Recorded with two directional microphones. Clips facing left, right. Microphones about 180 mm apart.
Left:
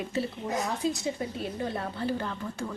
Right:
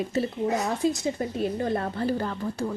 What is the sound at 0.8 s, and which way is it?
Speech, 60° right (ahead or behind).